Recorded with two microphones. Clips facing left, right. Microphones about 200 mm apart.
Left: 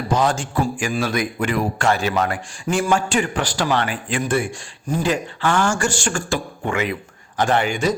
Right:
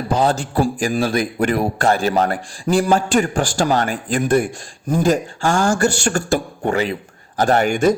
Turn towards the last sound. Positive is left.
turn(degrees=-50)  # may be behind; listen again after turning